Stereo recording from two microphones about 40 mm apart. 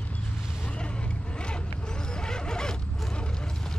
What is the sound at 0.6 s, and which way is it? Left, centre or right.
Vehicle, left.